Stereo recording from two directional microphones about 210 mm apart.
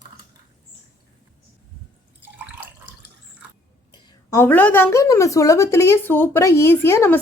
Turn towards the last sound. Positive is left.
turn(degrees=10)  # may be behind; listen again after turning